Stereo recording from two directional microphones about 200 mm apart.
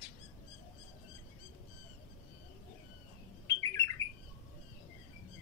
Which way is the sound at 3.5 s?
15° left (ahead or behind).